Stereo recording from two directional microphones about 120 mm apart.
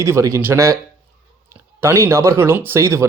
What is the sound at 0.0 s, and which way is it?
Speech, 25° right (ahead or behind).